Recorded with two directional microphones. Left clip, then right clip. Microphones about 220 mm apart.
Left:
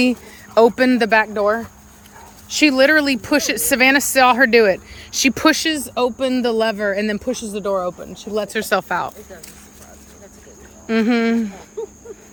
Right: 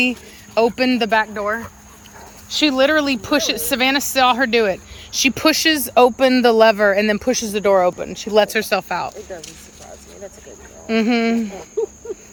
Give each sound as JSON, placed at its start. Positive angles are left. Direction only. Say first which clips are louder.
{"t": 0.0, "sound": "speech", "louder": "even", "side_deg": 20}
{"t": 5.6, "sound": "speech", "louder": "right 6 dB", "side_deg": 0}
{"t": 8.4, "sound": "speech", "louder": "right 7 dB", "side_deg": 0}
{"t": 8.7, "sound": "speech", "louder": "left 1 dB", "side_deg": 15}
{"t": 10.8, "sound": "speech", "louder": "even", "side_deg": 10}